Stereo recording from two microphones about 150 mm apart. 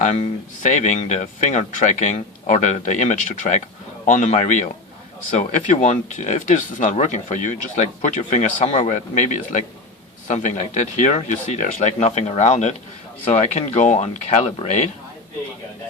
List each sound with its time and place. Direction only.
0.0 s speech: 55° left (ahead or behind)